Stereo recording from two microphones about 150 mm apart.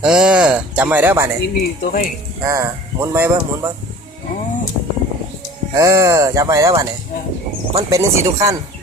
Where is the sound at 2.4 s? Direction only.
20° right (ahead or behind).